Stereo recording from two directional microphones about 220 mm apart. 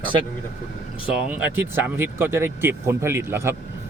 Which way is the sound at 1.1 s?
5° right (ahead or behind).